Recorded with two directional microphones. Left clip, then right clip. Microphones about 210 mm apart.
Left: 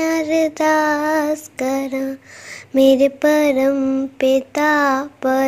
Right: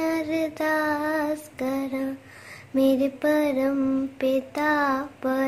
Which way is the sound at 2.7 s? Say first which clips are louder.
Left 9 dB; 35° left (ahead or behind).